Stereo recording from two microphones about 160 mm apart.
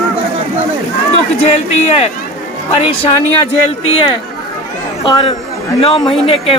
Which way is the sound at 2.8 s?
35° left (ahead or behind).